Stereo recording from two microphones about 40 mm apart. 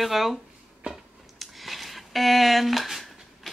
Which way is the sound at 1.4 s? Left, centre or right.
Centre.